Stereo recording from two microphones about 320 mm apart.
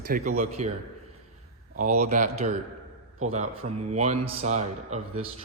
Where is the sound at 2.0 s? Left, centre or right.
Right.